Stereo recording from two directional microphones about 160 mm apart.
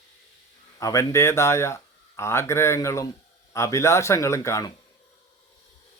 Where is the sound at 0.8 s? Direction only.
20° left (ahead or behind).